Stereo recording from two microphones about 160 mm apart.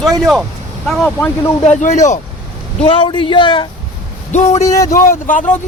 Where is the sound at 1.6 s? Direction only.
45° left (ahead or behind).